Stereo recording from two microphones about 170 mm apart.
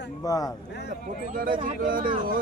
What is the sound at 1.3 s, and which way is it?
Speech, 55° right (ahead or behind).